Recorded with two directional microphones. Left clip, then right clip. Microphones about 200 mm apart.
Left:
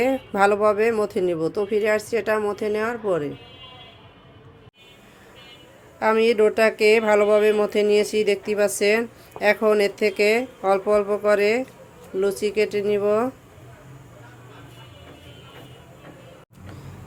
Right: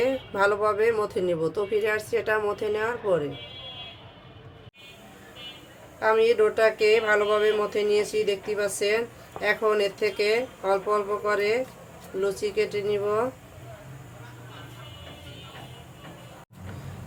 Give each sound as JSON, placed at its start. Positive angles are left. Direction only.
{"t": 0.0, "sound": "speech", "side_deg": 40}
{"t": 6.0, "sound": "speech", "side_deg": 40}